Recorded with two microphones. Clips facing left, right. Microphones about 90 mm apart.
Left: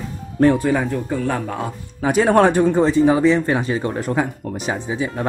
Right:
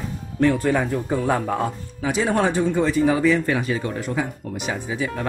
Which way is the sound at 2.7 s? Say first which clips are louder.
Left 4 dB; 30° left (ahead or behind).